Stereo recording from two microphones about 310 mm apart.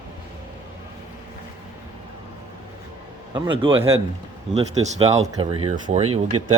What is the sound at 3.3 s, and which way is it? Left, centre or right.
Speech, centre.